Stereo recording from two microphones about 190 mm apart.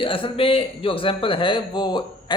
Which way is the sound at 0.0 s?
25° left (ahead or behind).